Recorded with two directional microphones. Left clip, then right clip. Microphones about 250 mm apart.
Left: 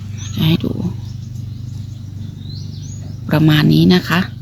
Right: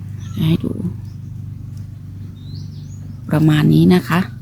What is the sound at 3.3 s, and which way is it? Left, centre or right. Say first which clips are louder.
A woman's voice: left 2 dB; centre.